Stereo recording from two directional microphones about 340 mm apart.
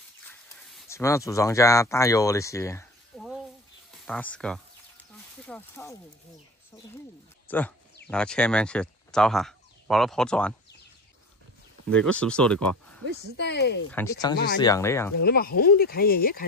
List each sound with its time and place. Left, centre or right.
0.3 s a sound: centre
3.9 s speech: centre
7.4 s speech: centre
11.9 s speech: centre
13.4 s speech: left
13.9 s speech: centre
15.1 s speech: left